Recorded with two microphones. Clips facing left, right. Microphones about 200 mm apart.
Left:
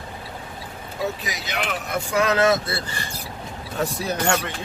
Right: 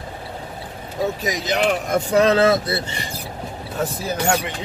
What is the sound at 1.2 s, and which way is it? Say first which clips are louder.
Speech: right 9 dB; 40° right (ahead or behind).